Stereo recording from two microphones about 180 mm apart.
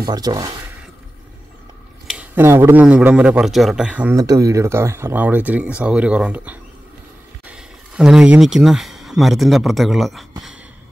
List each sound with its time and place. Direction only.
0.0 s speech: 20° right (ahead or behind)
2.0 s speech: 10° right (ahead or behind)
4.2 s speech: 20° right (ahead or behind); by 10.2 s centre (ahead or behind)